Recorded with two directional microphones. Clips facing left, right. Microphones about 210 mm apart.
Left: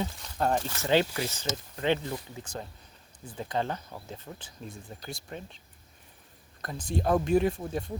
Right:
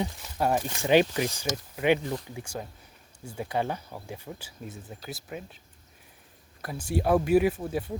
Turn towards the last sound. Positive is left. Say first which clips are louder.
# right 2 dB
turn(degrees=-5)  # may be behind; listen again after turning